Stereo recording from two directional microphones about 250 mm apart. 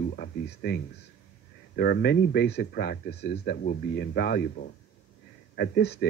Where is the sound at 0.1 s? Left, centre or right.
Left.